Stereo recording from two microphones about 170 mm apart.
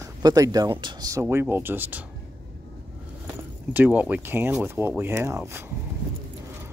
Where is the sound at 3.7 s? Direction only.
10° right (ahead or behind).